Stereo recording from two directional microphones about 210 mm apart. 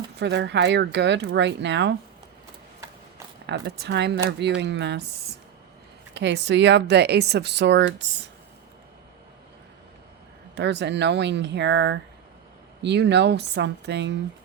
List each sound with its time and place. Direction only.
0.2 s speech: 55° right (ahead or behind)
3.4 s speech: 55° right (ahead or behind)
6.1 s speech: 55° right (ahead or behind)
10.5 s speech: 55° right (ahead or behind)